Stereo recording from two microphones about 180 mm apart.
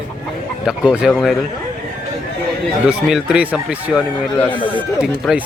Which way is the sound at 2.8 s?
5° right (ahead or behind).